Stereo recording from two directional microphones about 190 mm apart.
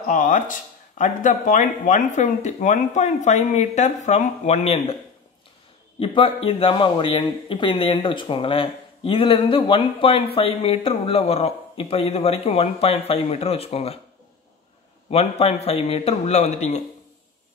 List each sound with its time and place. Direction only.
0.0 s speech: 40° left (ahead or behind)
5.9 s speech: 30° left (ahead or behind)
15.0 s speech: 35° left (ahead or behind)